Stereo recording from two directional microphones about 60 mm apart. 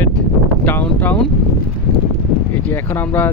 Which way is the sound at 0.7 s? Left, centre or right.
Left.